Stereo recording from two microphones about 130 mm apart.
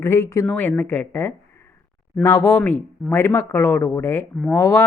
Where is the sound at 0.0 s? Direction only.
20° left (ahead or behind).